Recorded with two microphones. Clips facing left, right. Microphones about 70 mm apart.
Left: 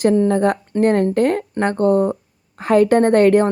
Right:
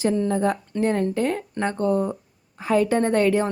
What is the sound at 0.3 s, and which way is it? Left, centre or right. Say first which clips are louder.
A woman's voice: left 6 dB; left.